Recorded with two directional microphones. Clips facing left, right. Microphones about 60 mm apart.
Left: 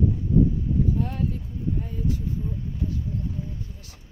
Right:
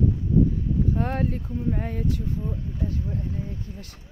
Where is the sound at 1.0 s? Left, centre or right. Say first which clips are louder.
Right 2 dB; right.